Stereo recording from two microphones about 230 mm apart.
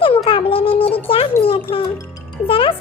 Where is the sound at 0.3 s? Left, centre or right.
Left.